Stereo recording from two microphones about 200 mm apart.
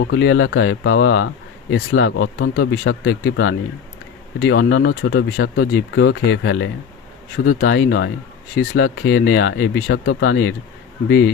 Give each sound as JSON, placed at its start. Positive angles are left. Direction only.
{"t": 0.0, "sound": "speech", "side_deg": 65}